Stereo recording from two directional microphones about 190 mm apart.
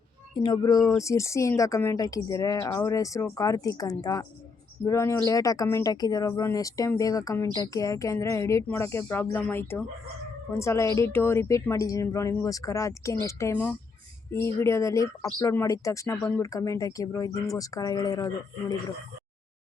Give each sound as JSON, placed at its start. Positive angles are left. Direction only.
{"t": 0.3, "sound": "speech", "side_deg": 25}